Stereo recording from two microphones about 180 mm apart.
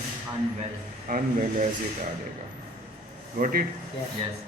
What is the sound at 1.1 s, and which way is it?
Speech, 55° right (ahead or behind).